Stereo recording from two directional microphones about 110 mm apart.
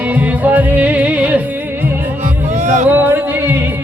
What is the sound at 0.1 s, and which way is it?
Music, 15° right (ahead or behind).